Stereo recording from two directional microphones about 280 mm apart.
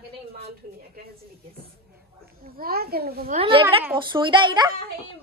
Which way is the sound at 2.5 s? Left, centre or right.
Right.